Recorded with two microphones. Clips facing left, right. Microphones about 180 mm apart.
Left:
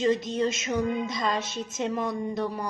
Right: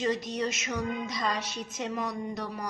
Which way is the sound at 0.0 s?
25° left (ahead or behind).